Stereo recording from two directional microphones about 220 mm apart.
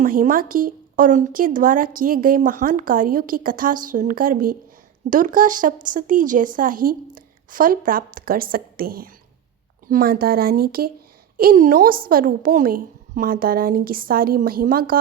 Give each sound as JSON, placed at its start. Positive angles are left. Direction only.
{"t": 0.0, "sound": "speech", "side_deg": -40}